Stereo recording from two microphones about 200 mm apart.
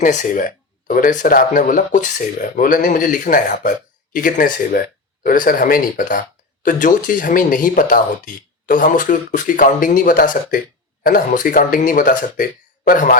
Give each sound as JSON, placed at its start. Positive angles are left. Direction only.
{"t": 0.0, "sound": "speech", "side_deg": 40}